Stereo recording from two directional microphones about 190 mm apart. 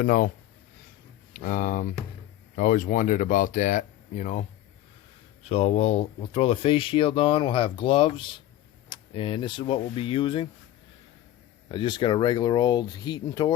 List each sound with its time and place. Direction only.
0.0 s speech: 50° left (ahead or behind)
1.3 s speech: 50° left (ahead or behind); by 10.5 s 25° left (ahead or behind)
11.7 s speech: 25° left (ahead or behind)